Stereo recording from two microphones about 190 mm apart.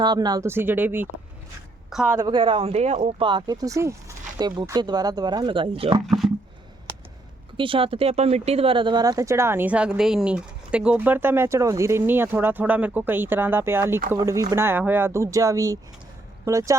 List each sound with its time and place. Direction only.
0.0 s a woman's voice: 20° right (ahead or behind); by 2.1 s centre (ahead or behind)
2.1 s speech: 25° right (ahead or behind)
6.1 s speech: centre (ahead or behind)
7.5 s speech: 25° right (ahead or behind)